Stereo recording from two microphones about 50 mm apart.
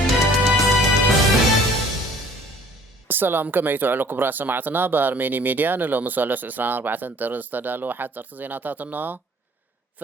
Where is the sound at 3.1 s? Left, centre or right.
Right.